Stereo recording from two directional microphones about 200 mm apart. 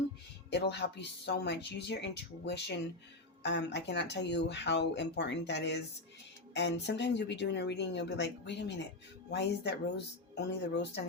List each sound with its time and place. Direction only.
0.5 s speech: 60° left (ahead or behind)